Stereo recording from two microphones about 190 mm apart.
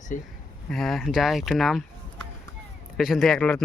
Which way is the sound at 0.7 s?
Centre (ahead or behind).